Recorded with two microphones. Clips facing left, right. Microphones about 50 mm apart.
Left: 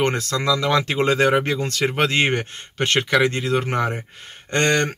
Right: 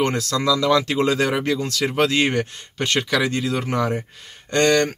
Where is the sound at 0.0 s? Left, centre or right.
Left.